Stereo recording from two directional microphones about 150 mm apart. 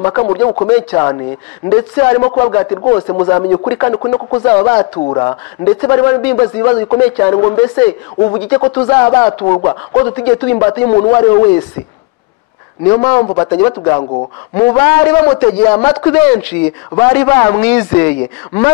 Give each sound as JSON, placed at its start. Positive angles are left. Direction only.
{"t": 0.0, "sound": "speech", "side_deg": 15}
{"t": 2.6, "sound": "speech", "side_deg": 25}
{"t": 4.9, "sound": "speech", "side_deg": 35}
{"t": 5.2, "sound": "speech", "side_deg": 20}
{"t": 7.2, "sound": "speech", "side_deg": 25}
{"t": 12.9, "sound": "speech", "side_deg": 15}